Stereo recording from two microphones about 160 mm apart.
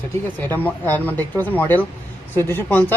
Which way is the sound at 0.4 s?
10° left (ahead or behind).